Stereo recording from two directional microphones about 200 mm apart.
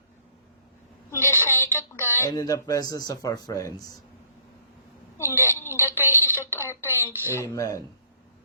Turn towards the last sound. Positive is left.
turn(degrees=15)  # may be behind; listen again after turning